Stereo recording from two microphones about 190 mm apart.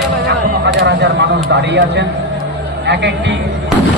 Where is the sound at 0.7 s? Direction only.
65° right (ahead or behind).